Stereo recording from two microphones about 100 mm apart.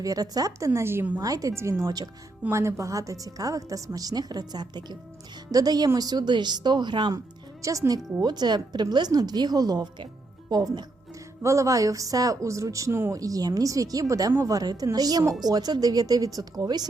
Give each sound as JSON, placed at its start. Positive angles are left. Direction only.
{"t": 0.0, "sound": "a woman's voice", "side_deg": -35}
{"t": 1.2, "sound": "a woman's voice", "side_deg": -35}
{"t": 7.6, "sound": "a woman's voice", "side_deg": -35}